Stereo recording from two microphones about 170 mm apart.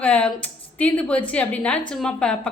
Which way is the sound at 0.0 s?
5° left (ahead or behind).